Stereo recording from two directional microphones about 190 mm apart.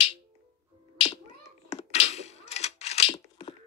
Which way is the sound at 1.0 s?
35° left (ahead or behind).